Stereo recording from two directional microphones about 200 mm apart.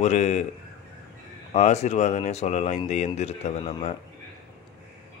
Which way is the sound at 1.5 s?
35° left (ahead or behind).